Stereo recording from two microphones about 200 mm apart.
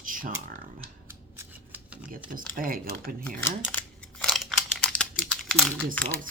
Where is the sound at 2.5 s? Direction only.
45° right (ahead or behind).